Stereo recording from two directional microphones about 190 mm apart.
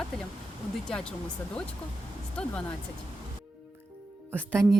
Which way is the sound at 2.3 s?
5° left (ahead or behind).